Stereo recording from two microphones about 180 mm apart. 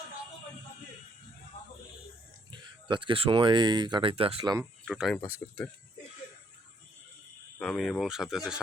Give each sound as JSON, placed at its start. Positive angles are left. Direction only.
{"t": 2.5, "sound": "speech", "side_deg": -25}
{"t": 4.9, "sound": "speech", "side_deg": 0}
{"t": 7.6, "sound": "speech", "side_deg": 5}